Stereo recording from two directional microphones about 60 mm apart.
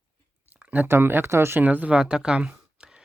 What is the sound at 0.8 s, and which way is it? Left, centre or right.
Speech, right.